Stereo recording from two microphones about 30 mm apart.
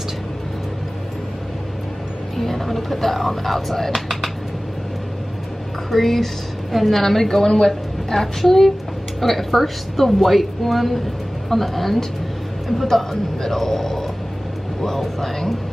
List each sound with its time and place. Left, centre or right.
2.3 s speech: centre
5.9 s a woman's voice: centre